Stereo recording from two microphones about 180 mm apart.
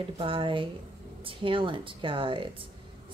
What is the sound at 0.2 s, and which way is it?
A woman's voice, 30° right (ahead or behind).